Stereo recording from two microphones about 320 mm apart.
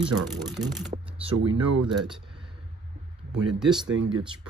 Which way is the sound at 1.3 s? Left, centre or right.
Right.